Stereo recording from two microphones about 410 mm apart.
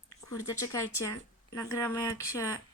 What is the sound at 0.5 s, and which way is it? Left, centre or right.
Speech, centre.